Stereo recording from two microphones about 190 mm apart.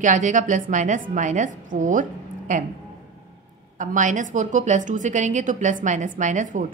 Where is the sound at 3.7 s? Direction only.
40° right (ahead or behind).